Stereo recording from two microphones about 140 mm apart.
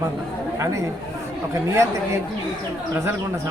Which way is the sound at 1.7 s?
20° right (ahead or behind).